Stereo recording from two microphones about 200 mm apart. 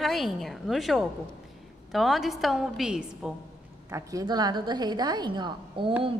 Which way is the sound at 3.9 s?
20° right (ahead or behind).